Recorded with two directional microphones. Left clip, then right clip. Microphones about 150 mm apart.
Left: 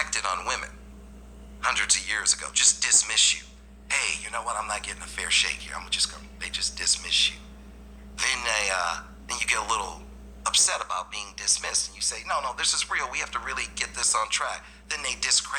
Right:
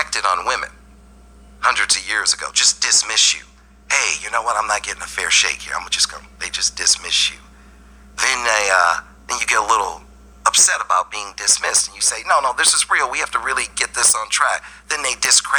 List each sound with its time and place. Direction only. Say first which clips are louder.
0.0 s a man's voice: right 9 dB; 40° right (ahead or behind)
8.1 s a man's voice: right 9 dB; 45° right (ahead or behind)